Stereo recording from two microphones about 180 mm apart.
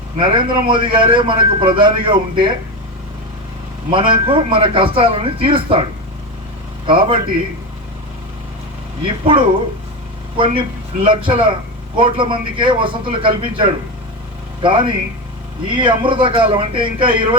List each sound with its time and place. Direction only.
0.2 s a man's voice: 30° right (ahead or behind)
3.9 s a man's voice: 30° right (ahead or behind)
6.8 s a man's voice: 30° right (ahead or behind)
9.0 s a man's voice: 30° right (ahead or behind)